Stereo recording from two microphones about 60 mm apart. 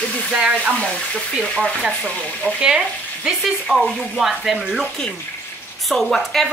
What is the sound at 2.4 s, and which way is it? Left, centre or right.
Frying, right.